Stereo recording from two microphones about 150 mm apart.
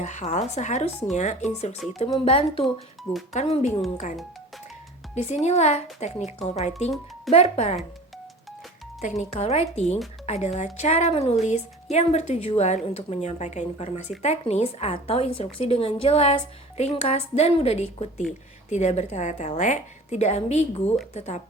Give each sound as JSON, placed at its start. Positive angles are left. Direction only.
{"t": 0.0, "sound": "a woman's voice", "side_deg": 50}
{"t": 5.1, "sound": "a woman's voice", "side_deg": 50}
{"t": 9.0, "sound": "a woman's voice", "side_deg": 50}